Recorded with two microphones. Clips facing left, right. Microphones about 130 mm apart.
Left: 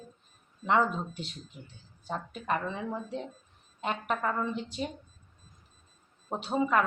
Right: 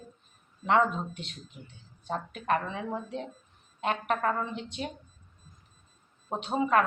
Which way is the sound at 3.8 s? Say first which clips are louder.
Right 3 dB; centre (ahead or behind).